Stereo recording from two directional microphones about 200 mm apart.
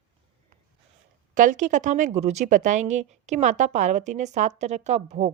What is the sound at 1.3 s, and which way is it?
Speech, 40° right (ahead or behind).